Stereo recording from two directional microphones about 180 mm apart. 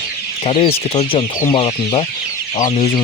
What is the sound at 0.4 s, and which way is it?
Speech, 30° left (ahead or behind).